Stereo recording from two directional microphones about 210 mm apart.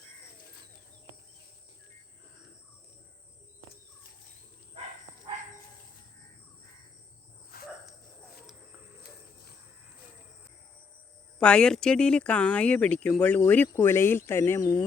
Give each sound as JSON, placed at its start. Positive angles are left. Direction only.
{"t": 7.5, "sound": "cricket", "side_deg": 45}
{"t": 11.3, "sound": "speech", "side_deg": 5}